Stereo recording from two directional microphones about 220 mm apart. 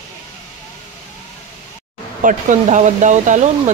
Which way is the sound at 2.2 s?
35° right (ahead or behind).